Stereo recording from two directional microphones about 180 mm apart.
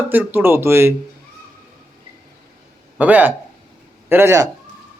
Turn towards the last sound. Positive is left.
turn(degrees=-15)  # may be behind; listen again after turning